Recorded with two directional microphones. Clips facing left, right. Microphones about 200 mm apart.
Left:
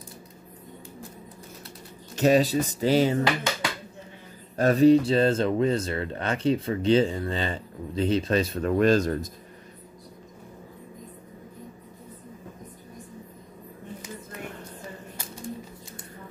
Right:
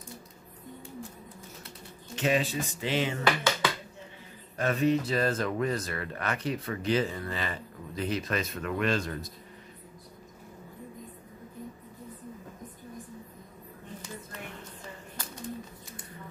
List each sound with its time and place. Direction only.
2.1 s speech: 40° left (ahead or behind)
4.6 s speech: 35° left (ahead or behind)